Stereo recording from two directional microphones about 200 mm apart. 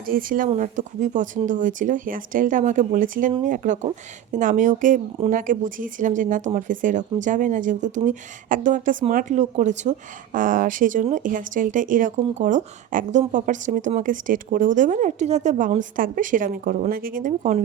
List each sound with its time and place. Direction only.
0.0 s speech: 45° right (ahead or behind)